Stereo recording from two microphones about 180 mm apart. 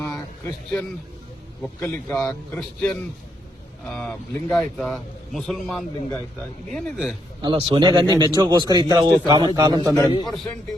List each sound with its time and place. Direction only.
0.0 s a sound: 10° left (ahead or behind)
1.6 s a man's voice: 5° left (ahead or behind)
7.4 s a man's voice: 30° right (ahead or behind)
9.9 s a man's voice: 25° left (ahead or behind)
10.2 s a man's voice: centre (ahead or behind)